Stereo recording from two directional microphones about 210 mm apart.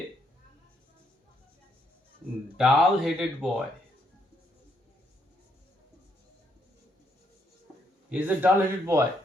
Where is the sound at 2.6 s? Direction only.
Centre (ahead or behind).